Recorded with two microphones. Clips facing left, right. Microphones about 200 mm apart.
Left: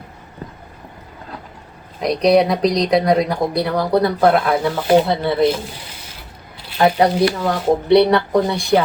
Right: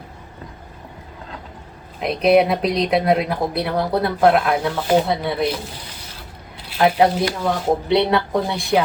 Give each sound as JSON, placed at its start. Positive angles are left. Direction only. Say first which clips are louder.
{"t": 2.0, "sound": "speech", "louder": "left 1 dB", "side_deg": -5}
{"t": 6.7, "sound": "speech", "louder": "left 1 dB", "side_deg": 0}